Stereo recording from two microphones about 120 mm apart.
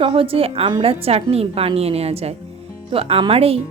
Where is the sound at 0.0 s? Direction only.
50° right (ahead or behind).